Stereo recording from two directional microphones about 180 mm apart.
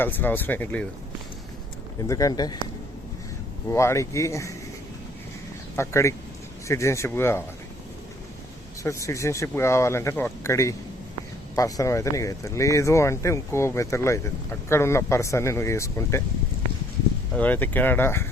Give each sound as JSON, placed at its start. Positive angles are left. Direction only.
{"t": 0.0, "sound": "speech", "side_deg": 10}
{"t": 2.0, "sound": "speech", "side_deg": 20}
{"t": 3.7, "sound": "speech", "side_deg": 15}
{"t": 5.7, "sound": "speech", "side_deg": 15}
{"t": 8.8, "sound": "speech", "side_deg": 15}
{"t": 17.3, "sound": "speech", "side_deg": 10}